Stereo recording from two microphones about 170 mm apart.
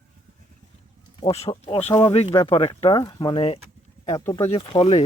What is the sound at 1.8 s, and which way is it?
Speech, 20° left (ahead or behind).